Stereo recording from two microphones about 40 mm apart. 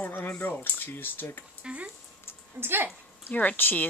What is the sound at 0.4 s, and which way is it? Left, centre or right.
Speech, left.